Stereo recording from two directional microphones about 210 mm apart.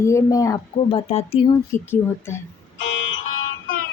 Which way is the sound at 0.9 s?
30° left (ahead or behind).